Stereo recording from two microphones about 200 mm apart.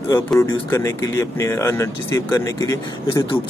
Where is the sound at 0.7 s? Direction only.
15° left (ahead or behind).